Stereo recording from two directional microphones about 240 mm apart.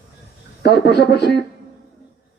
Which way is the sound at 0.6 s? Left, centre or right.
Left.